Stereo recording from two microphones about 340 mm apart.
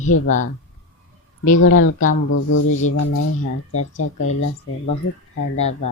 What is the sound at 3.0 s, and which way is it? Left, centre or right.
Speech, left.